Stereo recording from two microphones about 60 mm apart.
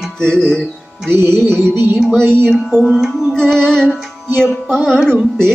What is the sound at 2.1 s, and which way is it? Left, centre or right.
Speech, right.